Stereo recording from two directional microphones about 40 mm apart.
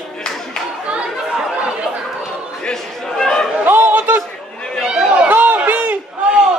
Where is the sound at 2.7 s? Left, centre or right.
Centre.